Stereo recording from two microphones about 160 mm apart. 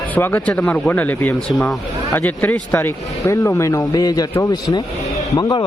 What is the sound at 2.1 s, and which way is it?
A man's voice, 10° left (ahead or behind).